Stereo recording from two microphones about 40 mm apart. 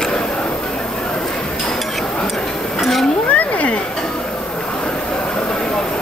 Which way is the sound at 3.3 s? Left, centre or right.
Left.